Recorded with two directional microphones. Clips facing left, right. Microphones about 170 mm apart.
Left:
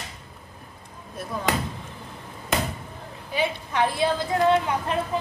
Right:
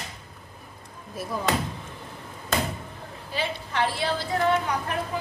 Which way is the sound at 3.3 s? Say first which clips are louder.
Left 3 dB; 15° left (ahead or behind).